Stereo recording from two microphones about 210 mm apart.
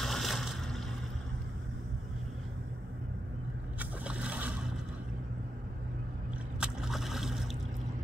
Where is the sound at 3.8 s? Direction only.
5° right (ahead or behind).